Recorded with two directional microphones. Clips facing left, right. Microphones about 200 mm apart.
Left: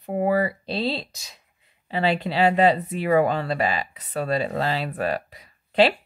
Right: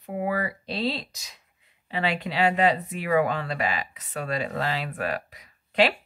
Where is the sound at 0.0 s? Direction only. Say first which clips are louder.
Left 6 dB; 35° left (ahead or behind).